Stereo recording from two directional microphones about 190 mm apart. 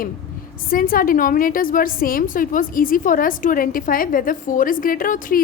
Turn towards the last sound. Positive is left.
turn(degrees=45)  # may be behind; listen again after turning